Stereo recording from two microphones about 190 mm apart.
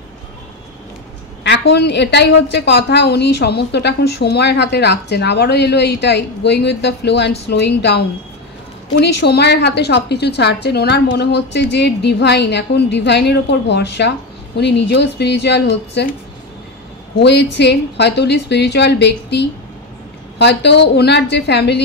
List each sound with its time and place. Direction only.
1.4 s a woman's voice: 65° left (ahead or behind)
17.2 s a woman's voice: 65° left (ahead or behind)